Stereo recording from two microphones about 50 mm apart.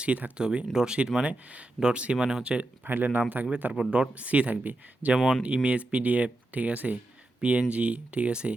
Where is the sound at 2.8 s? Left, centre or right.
Right.